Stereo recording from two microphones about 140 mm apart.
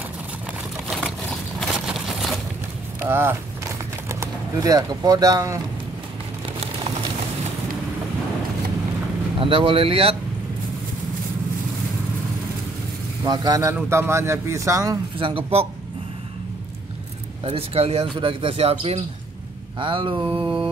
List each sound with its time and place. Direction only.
1.6 s a sound: centre (ahead or behind)
3.0 s a sound: 15° right (ahead or behind)
9.4 s speech: 40° right (ahead or behind)
13.2 s speech: 30° right (ahead or behind)
15.1 s speech: 40° right (ahead or behind)
17.5 s speech: 45° right (ahead or behind)